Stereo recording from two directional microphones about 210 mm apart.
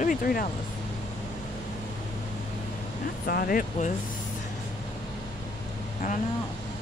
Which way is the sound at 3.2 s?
45° left (ahead or behind).